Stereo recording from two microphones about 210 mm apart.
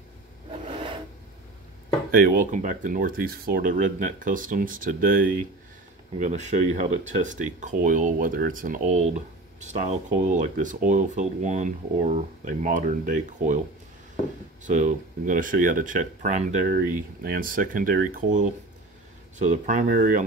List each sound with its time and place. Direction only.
2.1 s speech: 40° right (ahead or behind)
14.6 s speech: 35° right (ahead or behind)